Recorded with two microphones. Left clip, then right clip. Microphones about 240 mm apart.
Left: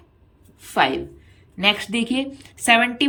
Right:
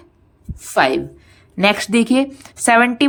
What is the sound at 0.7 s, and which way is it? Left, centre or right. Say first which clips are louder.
Speech: right 4 dB; right.